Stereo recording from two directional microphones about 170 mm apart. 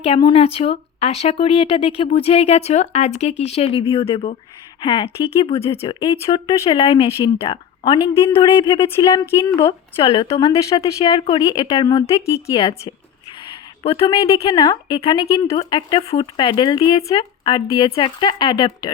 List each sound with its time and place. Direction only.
0.0 s speech: 30° left (ahead or behind)
10.0 s speech: 30° left (ahead or behind)
10.3 s speech: 20° left (ahead or behind)
13.4 s a sound: 30° left (ahead or behind)
14.1 s speech: 20° left (ahead or behind)